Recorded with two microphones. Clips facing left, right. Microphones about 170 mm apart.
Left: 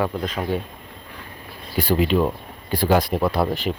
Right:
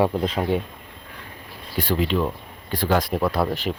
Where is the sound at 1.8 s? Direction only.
10° left (ahead or behind).